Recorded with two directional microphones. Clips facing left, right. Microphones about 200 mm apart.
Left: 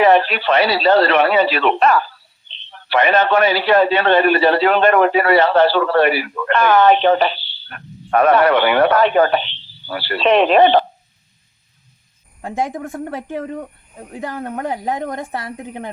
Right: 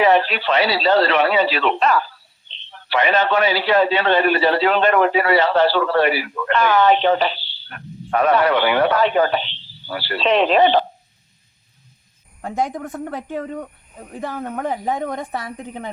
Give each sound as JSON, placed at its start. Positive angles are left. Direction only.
{"t": 0.0, "sound": "a man's voice", "side_deg": 55}
{"t": 12.4, "sound": "a man's voice", "side_deg": 5}